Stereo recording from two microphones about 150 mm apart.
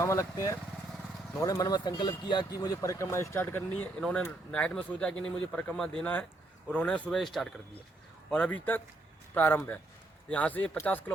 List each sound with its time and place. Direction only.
0.0 s speech: 20° left (ahead or behind)